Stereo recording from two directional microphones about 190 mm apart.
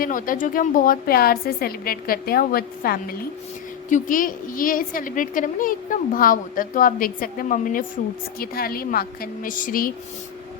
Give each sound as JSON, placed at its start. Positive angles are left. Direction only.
{"t": 0.0, "sound": "a woman's voice", "side_deg": 45}